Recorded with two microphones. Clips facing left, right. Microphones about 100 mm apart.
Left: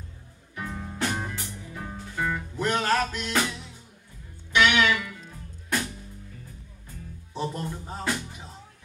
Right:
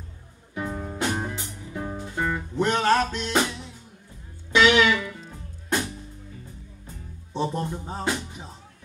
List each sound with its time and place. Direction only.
0.6 s music: 25° right (ahead or behind)
4.6 s music: 25° right (ahead or behind)
7.3 s music: 30° right (ahead or behind)